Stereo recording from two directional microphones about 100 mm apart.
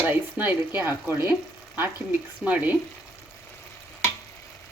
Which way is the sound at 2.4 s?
10° right (ahead or behind).